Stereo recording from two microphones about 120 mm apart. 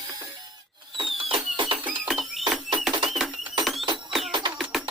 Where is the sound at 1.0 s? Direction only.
45° right (ahead or behind).